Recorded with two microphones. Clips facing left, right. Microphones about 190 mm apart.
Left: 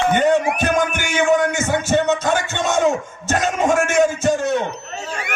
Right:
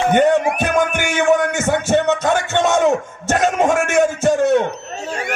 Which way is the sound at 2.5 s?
60° right (ahead or behind).